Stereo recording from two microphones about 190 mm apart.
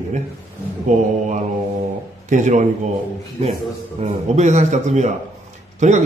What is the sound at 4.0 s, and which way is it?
A man's voice, 35° right (ahead or behind).